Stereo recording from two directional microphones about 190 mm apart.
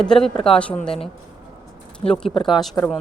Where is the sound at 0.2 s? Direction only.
30° left (ahead or behind).